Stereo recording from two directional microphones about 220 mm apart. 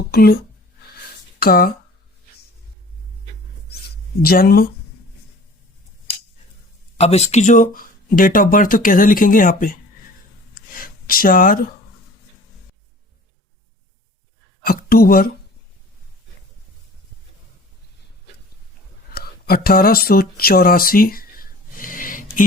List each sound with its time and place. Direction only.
0.1 s speech: 45° left (ahead or behind)
1.4 s speech: 45° left (ahead or behind)
4.3 s speech: 45° left (ahead or behind)
7.0 s speech: 30° left (ahead or behind)
10.5 s a sound: 40° left (ahead or behind)
14.6 s speech: 40° left (ahead or behind)
19.1 s a sound: 45° left (ahead or behind)